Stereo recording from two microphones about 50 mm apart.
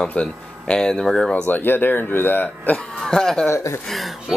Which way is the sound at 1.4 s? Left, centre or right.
Left.